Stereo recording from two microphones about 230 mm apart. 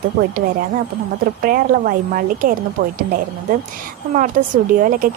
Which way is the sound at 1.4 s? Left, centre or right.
Right.